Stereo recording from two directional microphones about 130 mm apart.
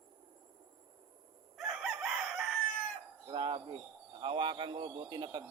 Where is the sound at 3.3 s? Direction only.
40° right (ahead or behind).